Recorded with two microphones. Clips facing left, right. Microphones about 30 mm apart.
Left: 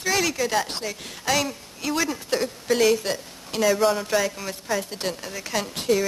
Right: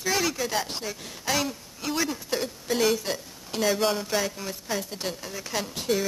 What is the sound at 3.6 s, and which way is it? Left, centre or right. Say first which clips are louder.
Speech: left 4 dB; centre.